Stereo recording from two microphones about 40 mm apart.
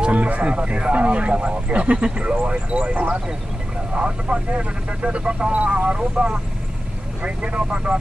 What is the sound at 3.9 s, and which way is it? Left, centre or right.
Speech, right.